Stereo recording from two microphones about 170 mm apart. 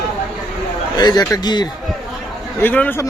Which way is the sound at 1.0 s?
25° left (ahead or behind).